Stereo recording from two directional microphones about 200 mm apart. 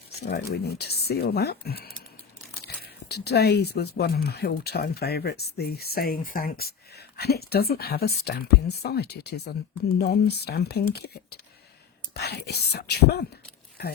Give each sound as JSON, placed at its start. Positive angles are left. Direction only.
{"t": 0.2, "sound": "speech", "side_deg": 55}